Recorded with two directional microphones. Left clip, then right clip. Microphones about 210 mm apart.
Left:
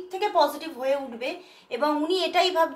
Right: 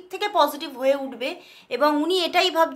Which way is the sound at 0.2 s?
35° right (ahead or behind).